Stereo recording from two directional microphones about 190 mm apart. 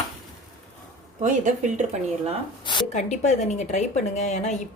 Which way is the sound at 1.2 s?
40° right (ahead or behind).